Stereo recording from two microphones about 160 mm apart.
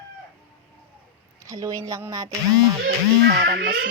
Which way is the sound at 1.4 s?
20° right (ahead or behind).